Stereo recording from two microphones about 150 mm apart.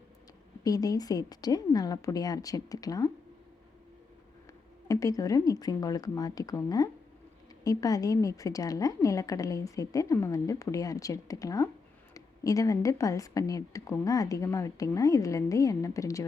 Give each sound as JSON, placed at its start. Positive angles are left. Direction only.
{"t": 0.6, "sound": "a woman's voice", "side_deg": 25}
{"t": 4.9, "sound": "a woman's voice", "side_deg": 20}